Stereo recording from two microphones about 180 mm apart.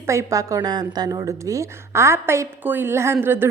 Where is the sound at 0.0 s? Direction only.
15° right (ahead or behind).